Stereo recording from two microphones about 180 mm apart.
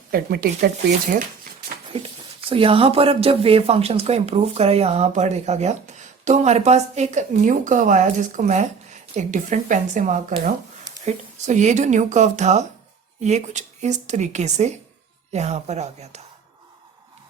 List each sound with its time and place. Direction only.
0.1 s speech: 60° right (ahead or behind)
1.9 s speech: 30° right (ahead or behind)